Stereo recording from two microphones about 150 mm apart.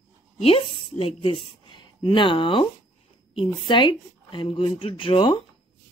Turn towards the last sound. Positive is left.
turn(degrees=35)  # may be behind; listen again after turning